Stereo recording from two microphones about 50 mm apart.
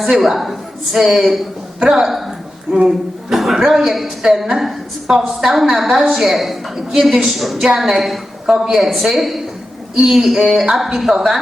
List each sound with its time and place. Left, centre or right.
0.0 s a woman's voice: centre
2.7 s music: centre
3.3 s a woman's voice: centre
8.5 s a woman's voice: centre
8.8 s a woman's voice: centre